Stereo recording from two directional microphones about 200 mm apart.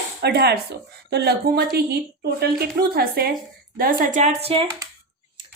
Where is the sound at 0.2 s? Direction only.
55° right (ahead or behind).